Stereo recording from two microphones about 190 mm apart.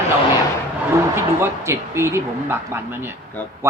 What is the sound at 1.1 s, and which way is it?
A man's voice, 15° right (ahead or behind).